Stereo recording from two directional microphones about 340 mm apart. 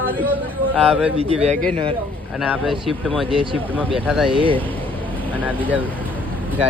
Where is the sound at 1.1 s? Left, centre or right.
Centre.